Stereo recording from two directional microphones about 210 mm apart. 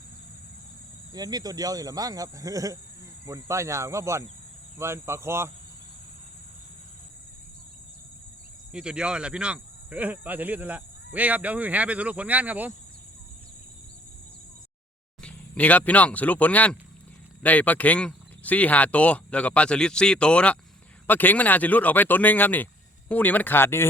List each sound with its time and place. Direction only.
1.1 s speech: 20° right (ahead or behind)
8.7 s speech: 5° right (ahead or behind)
15.2 s speech: 5° left (ahead or behind)